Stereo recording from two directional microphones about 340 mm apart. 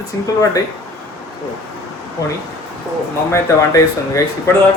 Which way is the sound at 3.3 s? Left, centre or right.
Centre.